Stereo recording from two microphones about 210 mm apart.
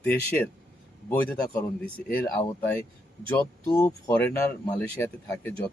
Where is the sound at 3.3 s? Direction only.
10° left (ahead or behind).